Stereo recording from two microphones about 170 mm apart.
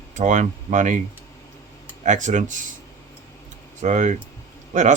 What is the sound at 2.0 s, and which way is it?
Speech, 45° right (ahead or behind).